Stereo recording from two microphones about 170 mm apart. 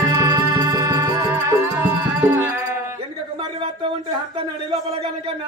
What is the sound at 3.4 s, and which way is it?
Speech, 30° right (ahead or behind).